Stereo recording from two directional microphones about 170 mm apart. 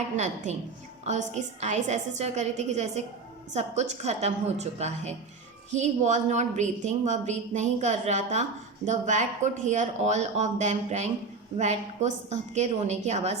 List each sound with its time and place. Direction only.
1.0 s a woman's voice: 45° right (ahead or behind)